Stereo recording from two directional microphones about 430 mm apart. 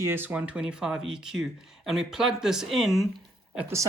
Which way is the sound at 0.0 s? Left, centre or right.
Centre.